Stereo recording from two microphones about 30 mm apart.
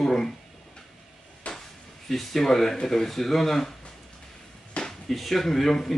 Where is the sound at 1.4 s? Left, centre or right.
Left.